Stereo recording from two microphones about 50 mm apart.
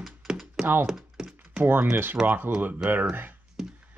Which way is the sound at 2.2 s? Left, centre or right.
Right.